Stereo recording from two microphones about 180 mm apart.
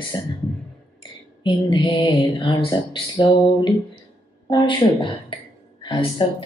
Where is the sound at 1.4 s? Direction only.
25° left (ahead or behind).